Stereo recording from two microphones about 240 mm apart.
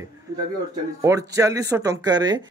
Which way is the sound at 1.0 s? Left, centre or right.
Centre.